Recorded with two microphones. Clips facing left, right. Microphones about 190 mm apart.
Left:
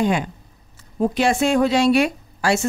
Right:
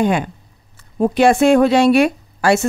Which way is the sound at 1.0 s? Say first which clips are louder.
Right 6 dB; 60° right (ahead or behind).